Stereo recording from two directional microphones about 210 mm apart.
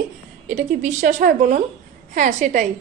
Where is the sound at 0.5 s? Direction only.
35° right (ahead or behind).